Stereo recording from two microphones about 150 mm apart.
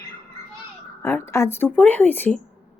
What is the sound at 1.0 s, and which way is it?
Speech, 20° left (ahead or behind).